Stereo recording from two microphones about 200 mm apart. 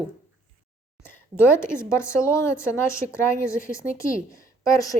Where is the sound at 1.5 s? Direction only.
15° left (ahead or behind).